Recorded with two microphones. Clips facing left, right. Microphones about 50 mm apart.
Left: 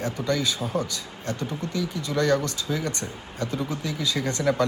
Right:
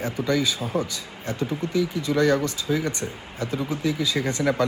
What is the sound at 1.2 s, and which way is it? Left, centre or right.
Speech, right.